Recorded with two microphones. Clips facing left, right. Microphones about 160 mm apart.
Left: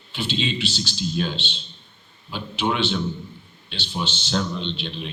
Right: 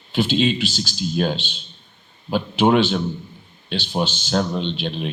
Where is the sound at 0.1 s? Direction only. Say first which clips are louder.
Right 8 dB; 45° right (ahead or behind).